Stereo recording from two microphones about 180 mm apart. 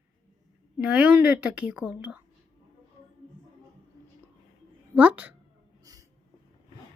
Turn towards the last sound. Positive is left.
turn(degrees=-20)  # may be behind; listen again after turning